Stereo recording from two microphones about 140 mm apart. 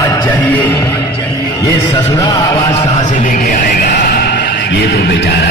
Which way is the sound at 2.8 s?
55° left (ahead or behind).